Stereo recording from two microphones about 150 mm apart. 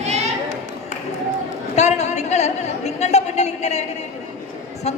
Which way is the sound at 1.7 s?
50° left (ahead or behind).